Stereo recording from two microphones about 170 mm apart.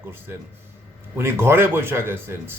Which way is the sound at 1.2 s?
15° right (ahead or behind).